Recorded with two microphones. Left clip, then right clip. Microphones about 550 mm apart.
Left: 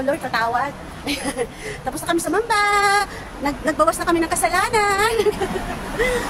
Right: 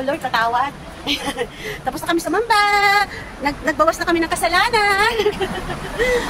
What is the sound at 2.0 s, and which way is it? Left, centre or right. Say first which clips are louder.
A man's voice: right 2 dB; left.